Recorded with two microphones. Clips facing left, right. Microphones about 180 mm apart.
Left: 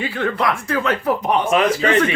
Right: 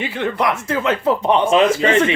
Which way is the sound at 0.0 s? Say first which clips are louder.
Right 1 dB; 20° right (ahead or behind).